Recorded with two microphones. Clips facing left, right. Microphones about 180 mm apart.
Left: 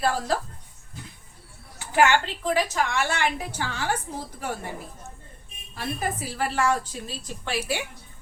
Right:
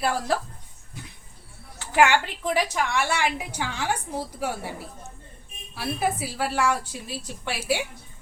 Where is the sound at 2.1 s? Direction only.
10° right (ahead or behind).